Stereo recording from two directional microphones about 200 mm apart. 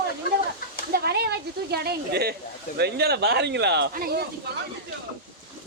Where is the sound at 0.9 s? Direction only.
50° right (ahead or behind).